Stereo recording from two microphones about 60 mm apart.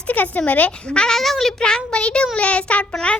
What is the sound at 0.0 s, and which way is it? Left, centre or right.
Speech, left.